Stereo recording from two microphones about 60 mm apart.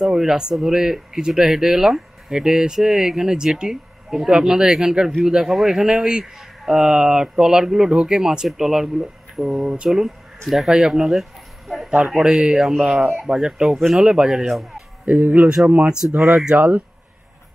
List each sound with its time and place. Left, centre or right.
0.0 s speech: centre
12.7 s speech: centre
13.0 s speech: centre
14.4 s speech: centre
15.0 s speech: right
15.4 s speech: centre
16.2 s speech: centre
16.4 s speech: right